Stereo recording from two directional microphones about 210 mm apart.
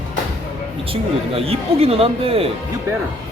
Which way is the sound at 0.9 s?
25° right (ahead or behind).